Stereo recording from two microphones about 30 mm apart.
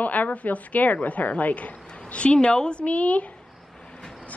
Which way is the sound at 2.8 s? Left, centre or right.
Left.